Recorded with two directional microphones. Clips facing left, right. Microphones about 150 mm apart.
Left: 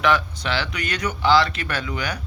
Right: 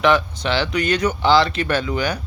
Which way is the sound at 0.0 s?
25° right (ahead or behind).